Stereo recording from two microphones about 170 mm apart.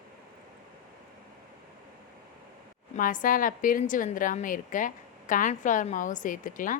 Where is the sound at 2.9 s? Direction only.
50° left (ahead or behind).